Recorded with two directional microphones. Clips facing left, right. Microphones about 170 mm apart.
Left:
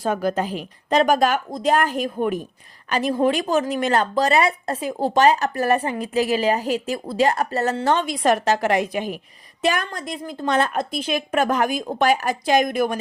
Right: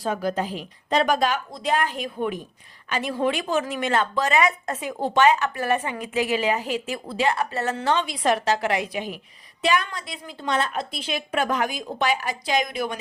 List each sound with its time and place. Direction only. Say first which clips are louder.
0.0 s a woman's voice: left 3 dB; 50° left (ahead or behind)